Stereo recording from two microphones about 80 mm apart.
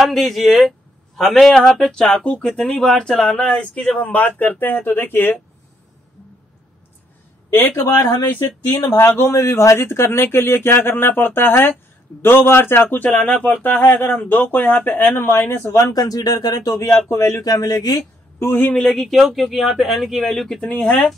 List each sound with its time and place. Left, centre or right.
0.0 s a man's voice: centre; by 5.3 s left
7.5 s speech: left
7.9 s speech: left
8.9 s speech: left
15.7 s speech: left
17.1 s speech: left
17.4 s speech: left
18.4 s speech: left
18.8 s speech: centre